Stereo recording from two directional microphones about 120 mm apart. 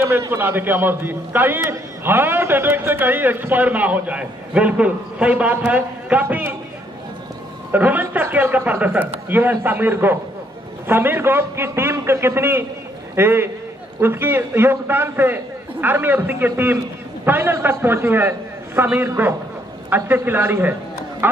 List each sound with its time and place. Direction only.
0.3 s a man's voice: 15° right (ahead or behind)
7.7 s a man's voice: 15° right (ahead or behind)